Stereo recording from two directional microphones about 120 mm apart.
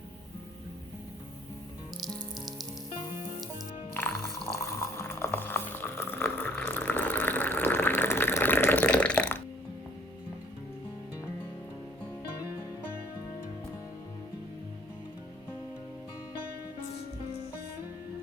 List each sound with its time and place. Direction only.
3.9 s music: 15° left (ahead or behind)
4.6 s boiling: 20° left (ahead or behind)